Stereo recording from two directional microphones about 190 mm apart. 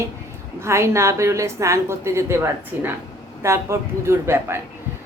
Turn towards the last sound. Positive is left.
turn(degrees=-15)  # may be behind; listen again after turning